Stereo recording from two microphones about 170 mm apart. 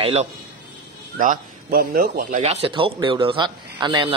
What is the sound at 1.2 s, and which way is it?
Speech, 55° right (ahead or behind).